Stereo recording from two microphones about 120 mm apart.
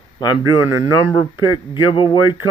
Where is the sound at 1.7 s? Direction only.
40° left (ahead or behind).